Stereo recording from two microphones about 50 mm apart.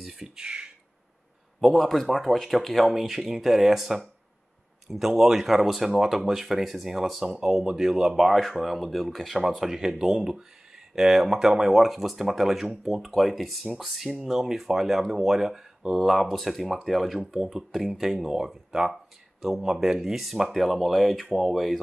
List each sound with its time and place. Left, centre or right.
0.0 s speech: centre
0.4 s a sound: right
1.6 s speech: centre